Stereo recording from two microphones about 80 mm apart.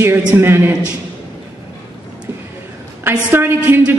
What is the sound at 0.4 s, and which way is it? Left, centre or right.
Speech, right.